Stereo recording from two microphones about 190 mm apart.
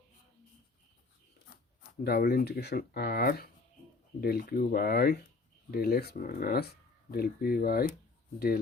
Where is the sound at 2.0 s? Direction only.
55° left (ahead or behind).